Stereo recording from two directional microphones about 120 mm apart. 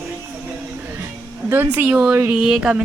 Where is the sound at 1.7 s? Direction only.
15° right (ahead or behind).